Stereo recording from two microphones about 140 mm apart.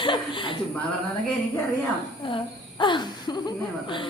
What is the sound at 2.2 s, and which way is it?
Speech, 35° left (ahead or behind).